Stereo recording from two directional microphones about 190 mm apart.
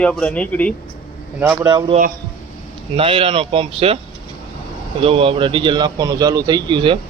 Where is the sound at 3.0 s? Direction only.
30° right (ahead or behind).